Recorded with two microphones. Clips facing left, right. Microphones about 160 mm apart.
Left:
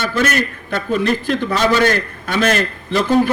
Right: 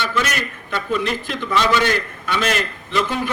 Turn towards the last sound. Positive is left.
turn(degrees=40)  # may be behind; listen again after turning